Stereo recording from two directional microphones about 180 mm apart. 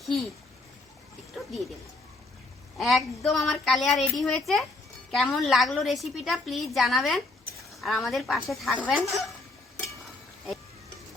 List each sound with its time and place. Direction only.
2.7 s a woman's voice: centre (ahead or behind)